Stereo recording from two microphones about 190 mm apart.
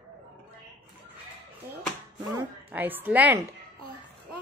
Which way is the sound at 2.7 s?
10° right (ahead or behind).